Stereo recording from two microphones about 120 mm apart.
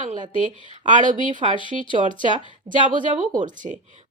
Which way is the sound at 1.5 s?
45° left (ahead or behind).